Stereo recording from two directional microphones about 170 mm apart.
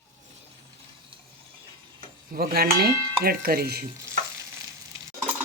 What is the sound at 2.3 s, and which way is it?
Dishes, 60° right (ahead or behind).